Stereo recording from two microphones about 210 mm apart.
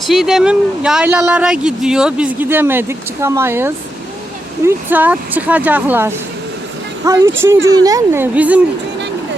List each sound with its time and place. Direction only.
0.1 s speech: centre (ahead or behind)